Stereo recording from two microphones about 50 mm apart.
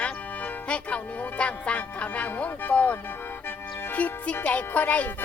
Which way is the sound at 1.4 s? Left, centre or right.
Left.